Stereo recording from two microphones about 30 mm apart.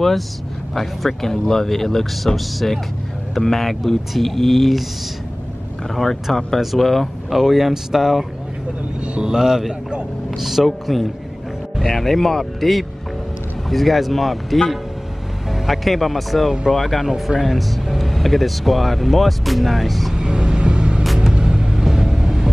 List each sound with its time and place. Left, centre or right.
0.7 s speech: centre
6.3 s speech: centre
7.3 s speech: centre
20.2 s vehicle: right